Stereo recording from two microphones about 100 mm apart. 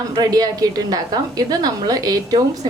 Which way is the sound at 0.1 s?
40° right (ahead or behind).